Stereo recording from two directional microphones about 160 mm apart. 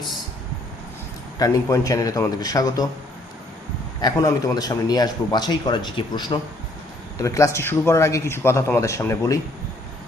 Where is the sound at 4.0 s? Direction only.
25° left (ahead or behind).